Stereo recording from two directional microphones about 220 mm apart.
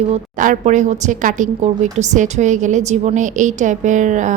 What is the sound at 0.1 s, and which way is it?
A woman's voice, 35° right (ahead or behind).